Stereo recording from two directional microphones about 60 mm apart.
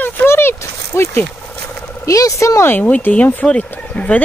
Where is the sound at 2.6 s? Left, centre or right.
Left.